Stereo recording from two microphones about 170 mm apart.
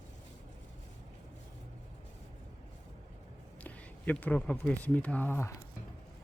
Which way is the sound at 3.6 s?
10° left (ahead or behind).